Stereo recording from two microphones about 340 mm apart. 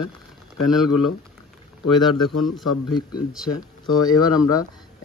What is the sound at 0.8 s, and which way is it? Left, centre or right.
Speech, left.